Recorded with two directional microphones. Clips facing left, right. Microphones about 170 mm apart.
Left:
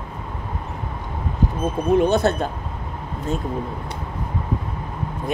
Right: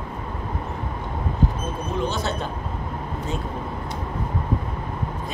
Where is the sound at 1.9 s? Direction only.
60° left (ahead or behind).